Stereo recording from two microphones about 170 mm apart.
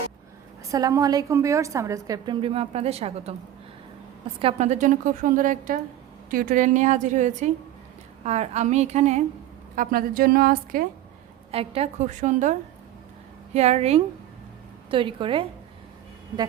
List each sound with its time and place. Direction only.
0.7 s a woman's voice: 20° right (ahead or behind); by 3.3 s 35° right (ahead or behind)
4.4 s a woman's voice: 35° right (ahead or behind)
9.7 s a woman's voice: 55° right (ahead or behind)
11.5 s a woman's voice: 35° right (ahead or behind)